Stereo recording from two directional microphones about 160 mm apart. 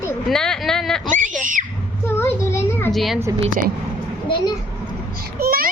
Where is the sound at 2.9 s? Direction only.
Centre (ahead or behind).